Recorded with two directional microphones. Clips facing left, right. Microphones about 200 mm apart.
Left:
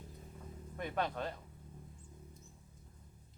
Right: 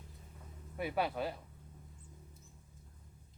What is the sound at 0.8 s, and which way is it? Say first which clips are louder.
Speech: right 2 dB; 10° right (ahead or behind).